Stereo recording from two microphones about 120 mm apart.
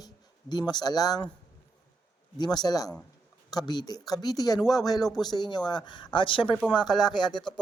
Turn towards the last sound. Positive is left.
turn(degrees=40)  # may be behind; listen again after turning